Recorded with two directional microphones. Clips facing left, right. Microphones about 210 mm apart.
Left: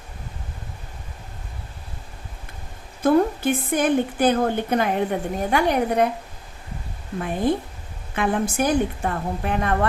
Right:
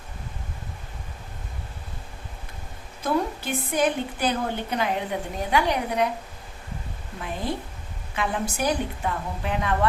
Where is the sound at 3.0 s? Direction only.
50° left (ahead or behind).